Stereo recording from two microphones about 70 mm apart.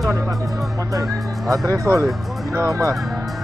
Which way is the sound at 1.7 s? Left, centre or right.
Right.